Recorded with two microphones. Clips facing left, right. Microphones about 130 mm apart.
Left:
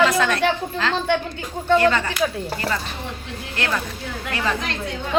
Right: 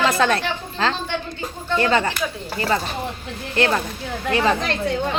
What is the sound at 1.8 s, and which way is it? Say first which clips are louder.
Speech: even; 30° right (ahead or behind).